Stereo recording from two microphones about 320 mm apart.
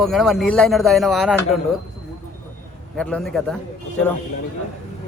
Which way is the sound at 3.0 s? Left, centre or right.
Centre.